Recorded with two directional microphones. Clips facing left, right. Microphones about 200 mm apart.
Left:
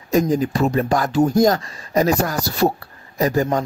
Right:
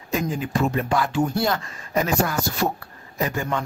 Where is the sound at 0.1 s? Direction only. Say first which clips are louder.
Left 7 dB; 40° left (ahead or behind).